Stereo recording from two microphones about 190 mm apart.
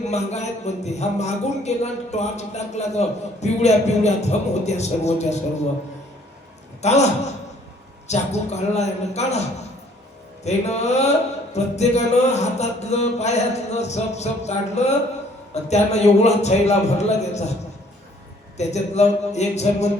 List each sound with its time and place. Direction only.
0.1 s speech: 35° left (ahead or behind)
6.8 s speech: 35° left (ahead or behind)
10.4 s speech: 35° left (ahead or behind)
18.5 s speech: 35° left (ahead or behind)